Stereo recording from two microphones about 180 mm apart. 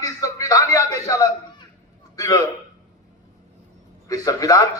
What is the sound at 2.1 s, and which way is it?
Speech, 20° left (ahead or behind).